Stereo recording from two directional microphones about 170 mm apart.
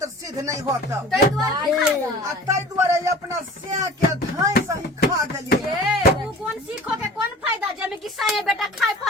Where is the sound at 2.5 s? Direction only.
15° right (ahead or behind).